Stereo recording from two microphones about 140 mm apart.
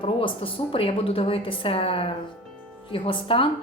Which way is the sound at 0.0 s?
40° left (ahead or behind).